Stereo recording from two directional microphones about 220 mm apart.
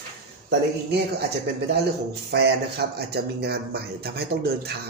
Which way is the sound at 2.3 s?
45° right (ahead or behind).